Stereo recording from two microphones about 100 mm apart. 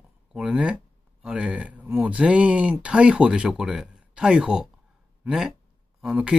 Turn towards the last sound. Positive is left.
turn(degrees=-10)  # may be behind; listen again after turning